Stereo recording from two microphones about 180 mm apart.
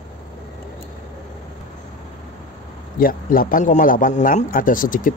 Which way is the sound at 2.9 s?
50° left (ahead or behind).